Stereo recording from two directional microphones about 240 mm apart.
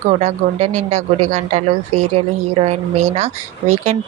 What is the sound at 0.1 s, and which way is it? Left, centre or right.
A woman's voice, right.